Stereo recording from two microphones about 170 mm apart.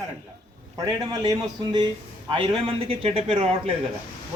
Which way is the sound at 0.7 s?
25° right (ahead or behind).